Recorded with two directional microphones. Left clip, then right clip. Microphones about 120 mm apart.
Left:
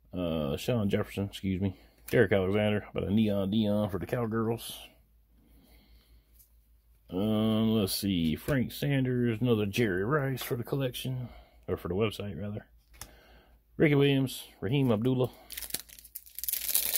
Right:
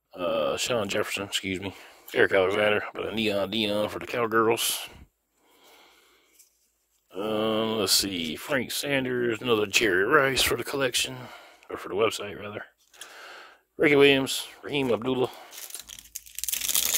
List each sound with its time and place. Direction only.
0.2 s speech: 45° right (ahead or behind)
4.2 s speech: 65° right (ahead or behind)
7.2 s speech: 35° right (ahead or behind)
13.2 s a sound: 40° right (ahead or behind)
15.0 s speech: 40° right (ahead or behind)
16.3 s tearing: 15° right (ahead or behind)